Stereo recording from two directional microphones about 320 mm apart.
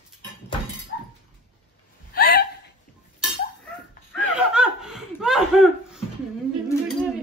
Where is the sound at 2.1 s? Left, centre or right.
Left.